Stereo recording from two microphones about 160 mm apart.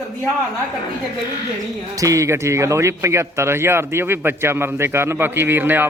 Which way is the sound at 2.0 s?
20° right (ahead or behind).